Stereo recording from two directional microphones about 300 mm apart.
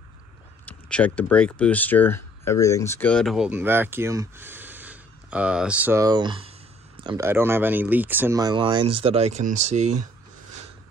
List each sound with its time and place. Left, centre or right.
0.7 s speech: centre; by 10.0 s right